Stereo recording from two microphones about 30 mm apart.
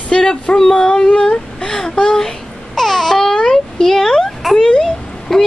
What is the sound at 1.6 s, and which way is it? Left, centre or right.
Babbling, left.